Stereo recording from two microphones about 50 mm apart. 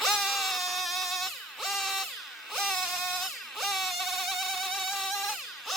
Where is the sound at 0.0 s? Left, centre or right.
Centre.